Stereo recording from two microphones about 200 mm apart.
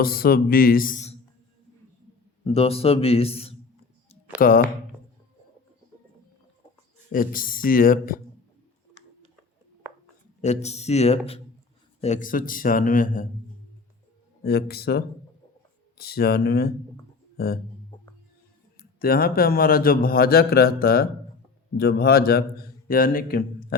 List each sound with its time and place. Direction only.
0.0 s a man's voice: 50° left (ahead or behind)
2.4 s a man's voice: 30° left (ahead or behind)
4.4 s a man's voice: 45° left (ahead or behind)
7.1 s a man's voice: 45° left (ahead or behind)
10.4 s a man's voice: 35° left (ahead or behind)
14.4 s a man's voice: 50° left (ahead or behind)
17.9 s music: 25° left (ahead or behind)
18.9 s a man's voice: 45° left (ahead or behind)